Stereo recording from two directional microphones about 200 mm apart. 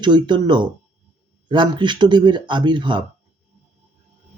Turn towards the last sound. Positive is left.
turn(degrees=-25)  # may be behind; listen again after turning